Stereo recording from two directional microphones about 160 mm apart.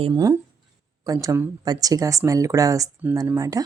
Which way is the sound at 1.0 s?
20° right (ahead or behind).